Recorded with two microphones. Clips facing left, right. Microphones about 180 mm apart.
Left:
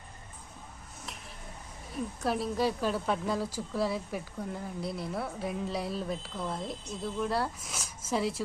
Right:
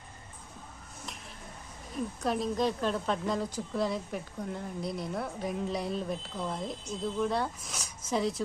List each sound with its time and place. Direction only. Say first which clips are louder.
2.2 s a woman's voice: even; 5° left (ahead or behind)